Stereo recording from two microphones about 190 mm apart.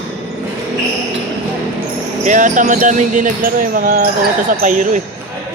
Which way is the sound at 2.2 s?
40° right (ahead or behind).